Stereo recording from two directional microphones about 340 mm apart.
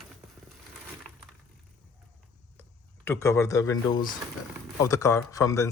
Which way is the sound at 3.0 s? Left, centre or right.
Centre.